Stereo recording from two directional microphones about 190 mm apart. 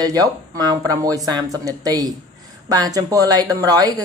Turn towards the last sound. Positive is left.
turn(degrees=-20)  # may be behind; listen again after turning